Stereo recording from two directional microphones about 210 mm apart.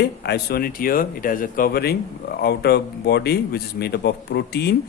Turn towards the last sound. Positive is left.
turn(degrees=50)  # may be behind; listen again after turning